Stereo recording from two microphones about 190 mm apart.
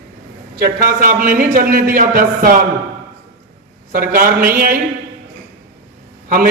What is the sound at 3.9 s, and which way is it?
Speech, 50° right (ahead or behind).